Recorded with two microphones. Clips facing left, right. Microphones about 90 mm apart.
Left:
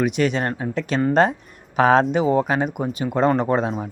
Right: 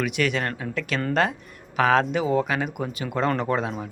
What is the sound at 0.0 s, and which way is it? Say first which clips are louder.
Speech: left 4 dB; 25° left (ahead or behind).